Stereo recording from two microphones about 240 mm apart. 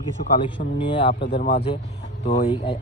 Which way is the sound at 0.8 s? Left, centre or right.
Centre.